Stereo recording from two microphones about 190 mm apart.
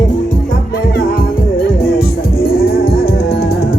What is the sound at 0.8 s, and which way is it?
Music, 50° left (ahead or behind).